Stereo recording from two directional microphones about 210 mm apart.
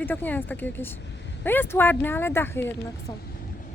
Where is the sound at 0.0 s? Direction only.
10° left (ahead or behind).